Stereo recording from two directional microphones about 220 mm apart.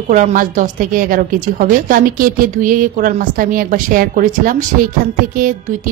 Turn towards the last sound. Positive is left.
turn(degrees=-40)  # may be behind; listen again after turning